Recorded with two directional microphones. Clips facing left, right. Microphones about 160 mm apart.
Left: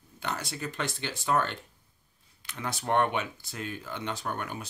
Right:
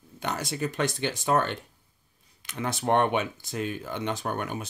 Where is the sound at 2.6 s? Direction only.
25° right (ahead or behind).